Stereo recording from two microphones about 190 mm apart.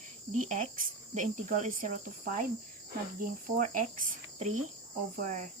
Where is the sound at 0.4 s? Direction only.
40° right (ahead or behind).